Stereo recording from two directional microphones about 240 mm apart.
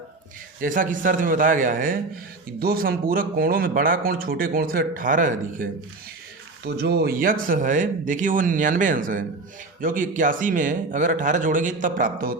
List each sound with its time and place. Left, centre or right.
0.6 s speech: right
6.7 s speech: right